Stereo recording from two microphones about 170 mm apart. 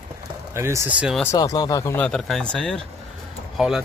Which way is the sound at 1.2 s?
20° left (ahead or behind).